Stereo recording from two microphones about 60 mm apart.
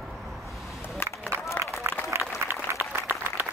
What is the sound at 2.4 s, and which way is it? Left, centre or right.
Applause, right.